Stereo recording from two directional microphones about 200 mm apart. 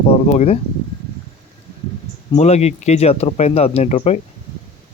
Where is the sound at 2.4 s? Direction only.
35° left (ahead or behind).